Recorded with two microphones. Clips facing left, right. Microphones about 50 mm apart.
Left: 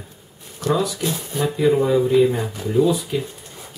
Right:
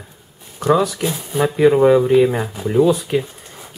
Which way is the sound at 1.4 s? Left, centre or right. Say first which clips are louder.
Right 6 dB; right.